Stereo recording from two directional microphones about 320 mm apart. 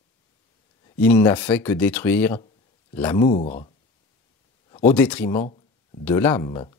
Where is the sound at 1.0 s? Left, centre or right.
Centre.